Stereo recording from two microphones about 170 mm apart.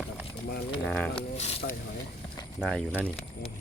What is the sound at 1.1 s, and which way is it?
Speech, 40° left (ahead or behind).